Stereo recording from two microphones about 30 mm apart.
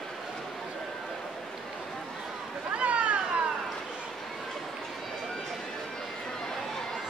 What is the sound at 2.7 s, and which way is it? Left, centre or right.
Vehicle, right.